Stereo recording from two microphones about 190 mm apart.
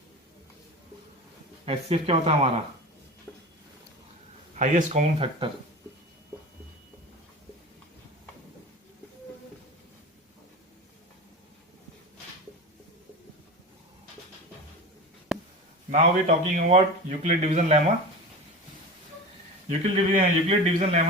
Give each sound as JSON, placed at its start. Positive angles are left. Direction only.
{"t": 1.6, "sound": "a man's voice", "side_deg": -30}
{"t": 3.3, "sound": "a sound", "side_deg": 5}
{"t": 4.5, "sound": "a man's voice", "side_deg": -40}
{"t": 15.3, "sound": "a sound", "side_deg": 0}
{"t": 15.9, "sound": "a man's voice", "side_deg": -40}
{"t": 19.8, "sound": "a man's voice", "side_deg": -30}